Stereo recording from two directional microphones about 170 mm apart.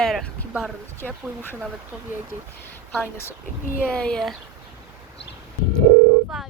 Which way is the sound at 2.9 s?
10° left (ahead or behind).